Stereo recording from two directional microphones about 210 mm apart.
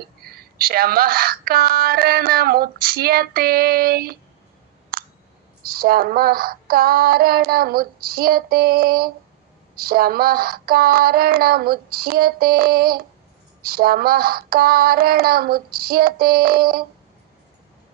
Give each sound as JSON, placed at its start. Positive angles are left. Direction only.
{"t": 0.2, "sound": "speech", "side_deg": -45}
{"t": 4.9, "sound": "clicking", "side_deg": -45}
{"t": 5.6, "sound": "speech", "side_deg": -45}